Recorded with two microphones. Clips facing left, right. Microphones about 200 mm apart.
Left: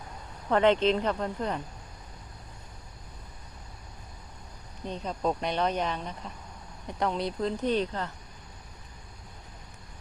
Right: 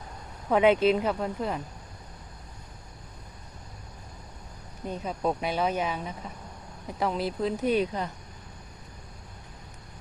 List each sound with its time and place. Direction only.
0.5 s speech: 10° right (ahead or behind)
4.9 s speech: 5° right (ahead or behind)